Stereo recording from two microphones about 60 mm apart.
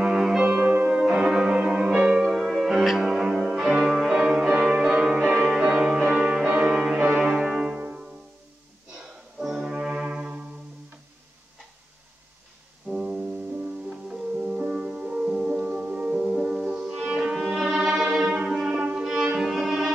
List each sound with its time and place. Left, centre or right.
0.4 s music: right
1.0 s music: centre
7.7 s music: right
8.9 s brass instrument: centre
13.0 s music: centre
14.0 s music: centre
17.2 s music: centre
19.5 s music: centre